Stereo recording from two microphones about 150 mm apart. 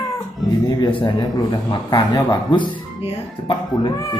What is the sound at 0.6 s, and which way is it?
A man's voice, 25° left (ahead or behind).